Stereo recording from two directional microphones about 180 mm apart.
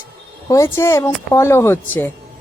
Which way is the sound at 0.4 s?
15° left (ahead or behind).